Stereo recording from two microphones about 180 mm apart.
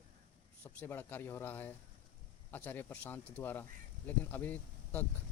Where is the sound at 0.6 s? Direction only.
10° left (ahead or behind).